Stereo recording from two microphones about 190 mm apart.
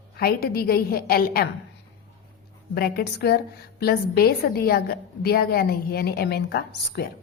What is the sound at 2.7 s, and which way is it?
A woman's voice, 55° left (ahead or behind).